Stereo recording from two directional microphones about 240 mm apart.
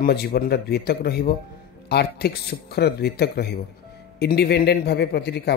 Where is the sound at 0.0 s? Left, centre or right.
Left.